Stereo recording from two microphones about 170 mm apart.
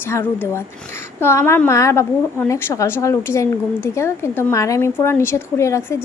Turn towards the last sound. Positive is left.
turn(degrees=15)  # may be behind; listen again after turning